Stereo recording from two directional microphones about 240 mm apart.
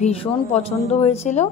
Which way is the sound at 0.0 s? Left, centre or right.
Left.